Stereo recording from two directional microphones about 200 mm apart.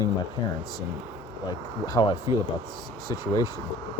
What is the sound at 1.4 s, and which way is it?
Speech, 20° left (ahead or behind).